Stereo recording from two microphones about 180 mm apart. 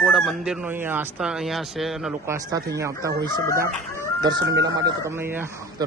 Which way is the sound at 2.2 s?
15° right (ahead or behind).